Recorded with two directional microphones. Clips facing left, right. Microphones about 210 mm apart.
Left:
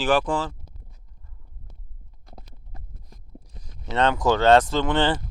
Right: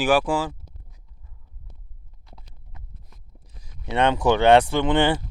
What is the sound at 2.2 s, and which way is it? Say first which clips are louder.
Clip-clop: left 4 dB; 45° left (ahead or behind).